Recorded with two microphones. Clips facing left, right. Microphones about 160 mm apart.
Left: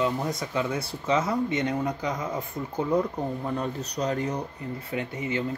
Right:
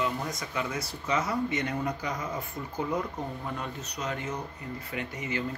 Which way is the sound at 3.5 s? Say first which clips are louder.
Left 7 dB; 35° left (ahead or behind).